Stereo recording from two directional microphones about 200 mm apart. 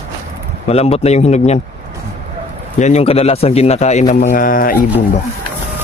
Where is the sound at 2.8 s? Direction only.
35° left (ahead or behind).